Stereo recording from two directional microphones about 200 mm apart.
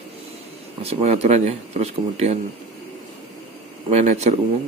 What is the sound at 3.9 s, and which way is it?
Speech, 35° right (ahead or behind).